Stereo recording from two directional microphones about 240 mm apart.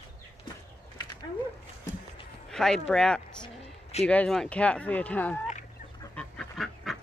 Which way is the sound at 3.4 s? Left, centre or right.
Left.